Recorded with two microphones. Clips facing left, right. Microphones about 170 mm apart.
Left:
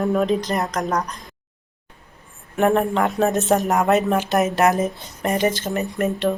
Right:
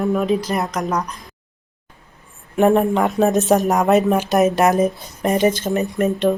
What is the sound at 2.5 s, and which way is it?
Speech, 10° right (ahead or behind).